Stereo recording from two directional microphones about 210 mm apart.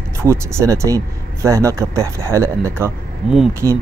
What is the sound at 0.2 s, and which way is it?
Speech, 15° right (ahead or behind).